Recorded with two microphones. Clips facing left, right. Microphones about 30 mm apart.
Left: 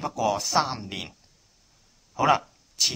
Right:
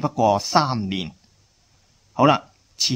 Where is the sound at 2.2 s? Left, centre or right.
Centre.